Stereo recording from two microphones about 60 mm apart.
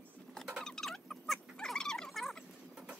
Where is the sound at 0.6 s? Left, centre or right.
Centre.